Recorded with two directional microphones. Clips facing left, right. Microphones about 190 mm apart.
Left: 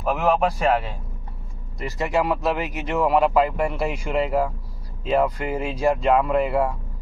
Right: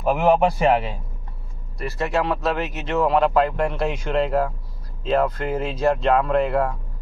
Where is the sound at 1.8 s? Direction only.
15° left (ahead or behind).